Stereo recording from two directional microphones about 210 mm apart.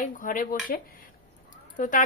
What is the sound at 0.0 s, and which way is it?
A woman's voice, 40° left (ahead or behind).